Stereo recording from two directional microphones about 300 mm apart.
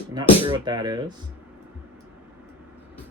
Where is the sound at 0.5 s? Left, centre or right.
Centre.